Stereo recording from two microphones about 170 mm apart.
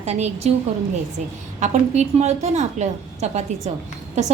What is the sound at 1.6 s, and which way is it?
A woman's voice, 40° right (ahead or behind).